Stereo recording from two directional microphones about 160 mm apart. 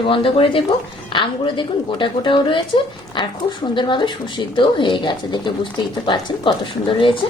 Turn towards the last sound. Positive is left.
turn(degrees=30)  # may be behind; listen again after turning